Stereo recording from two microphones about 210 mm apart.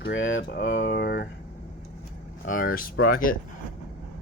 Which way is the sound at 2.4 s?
40° left (ahead or behind).